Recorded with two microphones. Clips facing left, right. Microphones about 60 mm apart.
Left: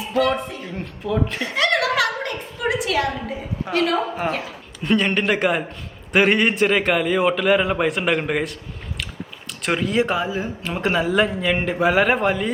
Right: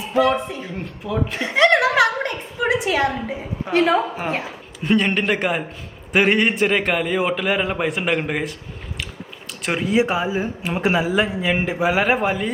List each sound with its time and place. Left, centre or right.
0.1 s a woman's voice: centre
0.8 s a man's voice: centre
1.4 s a sound: right
4.3 s speech: right
4.8 s a man's voice: centre
9.6 s speech: centre